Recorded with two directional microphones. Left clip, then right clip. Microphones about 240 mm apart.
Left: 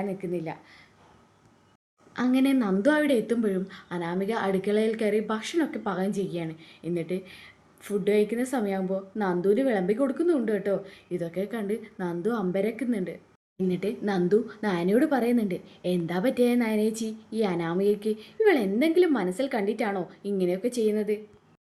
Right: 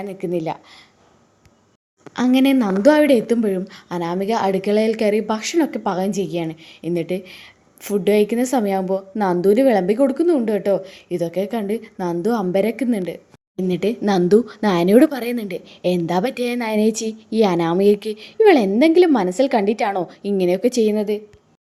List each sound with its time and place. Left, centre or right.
0.0 s speech: right
2.1 s a woman's voice: right